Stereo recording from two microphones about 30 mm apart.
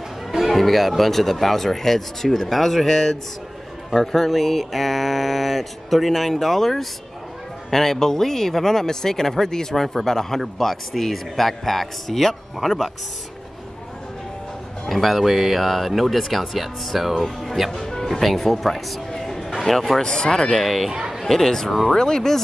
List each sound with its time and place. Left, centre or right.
0.4 s mantra: centre
2.5 s speech: centre
3.9 s mantra: centre
7.7 s speech: centre
14.9 s mantra: centre
17.1 s speech: centre
20.0 s speech: left
20.6 s mantra: centre
21.2 s speech: centre